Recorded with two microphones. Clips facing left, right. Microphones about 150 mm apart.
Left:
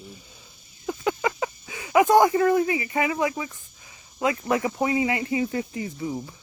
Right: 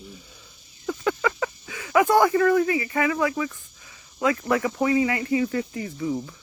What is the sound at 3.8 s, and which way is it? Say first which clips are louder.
Cricket: even; 20° left (ahead or behind).